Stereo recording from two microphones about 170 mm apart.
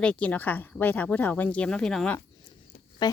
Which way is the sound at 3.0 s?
25° left (ahead or behind).